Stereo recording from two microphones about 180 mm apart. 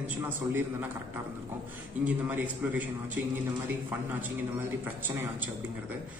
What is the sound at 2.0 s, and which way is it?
Speech, 10° right (ahead or behind).